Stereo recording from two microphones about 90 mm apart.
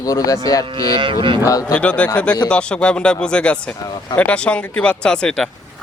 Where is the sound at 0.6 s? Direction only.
65° right (ahead or behind).